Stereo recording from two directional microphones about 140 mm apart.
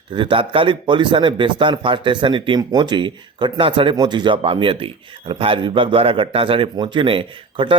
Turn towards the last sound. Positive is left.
turn(degrees=-40)  # may be behind; listen again after turning